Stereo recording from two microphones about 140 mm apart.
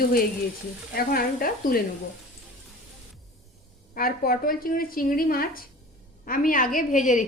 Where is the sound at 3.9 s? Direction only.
90° left.